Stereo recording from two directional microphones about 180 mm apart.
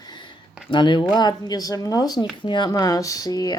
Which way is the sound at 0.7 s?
25° left (ahead or behind).